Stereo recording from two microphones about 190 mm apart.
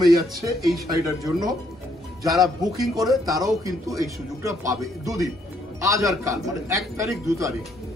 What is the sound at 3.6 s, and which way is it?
A man's voice, 15° right (ahead or behind).